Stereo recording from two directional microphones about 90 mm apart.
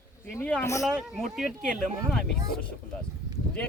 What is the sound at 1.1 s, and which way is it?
Speech, 5° right (ahead or behind).